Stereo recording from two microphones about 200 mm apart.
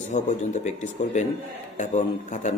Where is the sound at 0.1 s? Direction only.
35° left (ahead or behind).